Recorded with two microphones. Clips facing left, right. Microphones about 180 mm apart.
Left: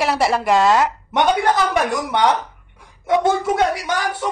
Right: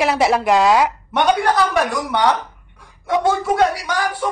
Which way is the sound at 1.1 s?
20° left (ahead or behind).